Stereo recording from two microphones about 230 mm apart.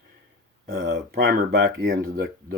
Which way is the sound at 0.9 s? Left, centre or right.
Right.